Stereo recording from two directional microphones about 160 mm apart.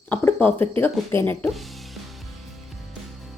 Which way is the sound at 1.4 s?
Centre (ahead or behind).